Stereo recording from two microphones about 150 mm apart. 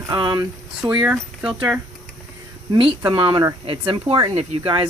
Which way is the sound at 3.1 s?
30° right (ahead or behind).